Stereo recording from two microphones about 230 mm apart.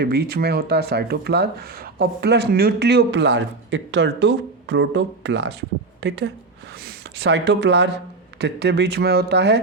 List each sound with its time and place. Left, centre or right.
0.0 s speech: right